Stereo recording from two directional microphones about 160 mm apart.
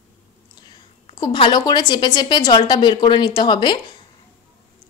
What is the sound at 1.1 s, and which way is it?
A woman's voice, 30° left (ahead or behind).